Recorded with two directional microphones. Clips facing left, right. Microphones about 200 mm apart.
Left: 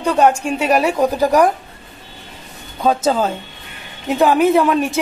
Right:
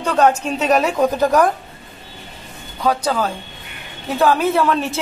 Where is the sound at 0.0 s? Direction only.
10° left (ahead or behind).